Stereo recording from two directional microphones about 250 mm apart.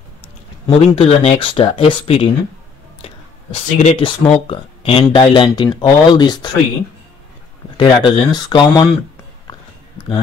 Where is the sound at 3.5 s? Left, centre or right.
Left.